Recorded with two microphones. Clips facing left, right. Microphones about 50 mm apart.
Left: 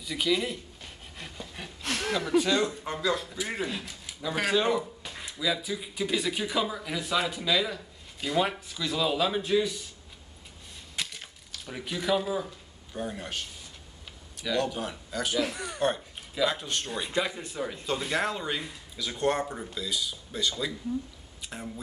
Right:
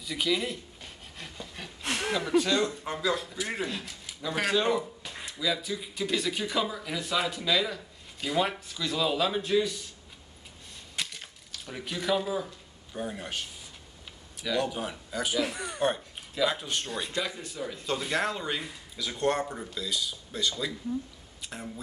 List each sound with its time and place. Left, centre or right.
0.0 s a sound: centre
1.8 s speech: centre
11.0 s a sound: centre
14.4 s speech: centre
17.1 s speech: left
17.8 s speech: centre